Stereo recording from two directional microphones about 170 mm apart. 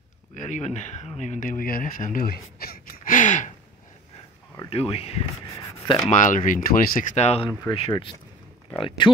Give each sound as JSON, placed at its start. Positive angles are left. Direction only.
{"t": 0.3, "sound": "speech", "side_deg": 45}
{"t": 4.6, "sound": "speech", "side_deg": 35}
{"t": 6.0, "sound": "speech", "side_deg": 50}